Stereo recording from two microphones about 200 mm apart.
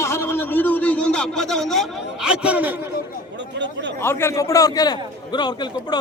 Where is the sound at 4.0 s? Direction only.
10° left (ahead or behind).